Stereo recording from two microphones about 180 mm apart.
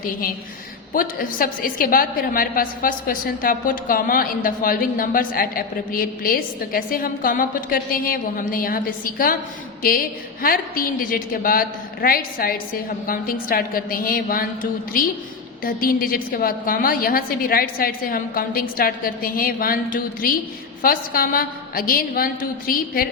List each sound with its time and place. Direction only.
0.9 s a woman's voice: 50° left (ahead or behind)